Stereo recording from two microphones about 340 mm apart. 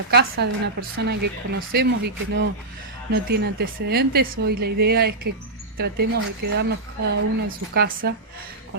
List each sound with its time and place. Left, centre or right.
0.1 s speech: right